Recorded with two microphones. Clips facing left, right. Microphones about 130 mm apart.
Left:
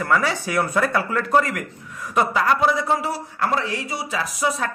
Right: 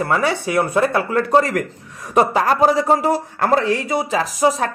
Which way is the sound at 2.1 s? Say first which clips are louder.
Right 4 dB; 40° right (ahead or behind).